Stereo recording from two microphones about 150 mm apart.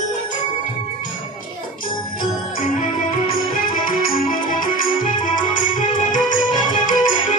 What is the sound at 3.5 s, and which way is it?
Music, 70° left (ahead or behind).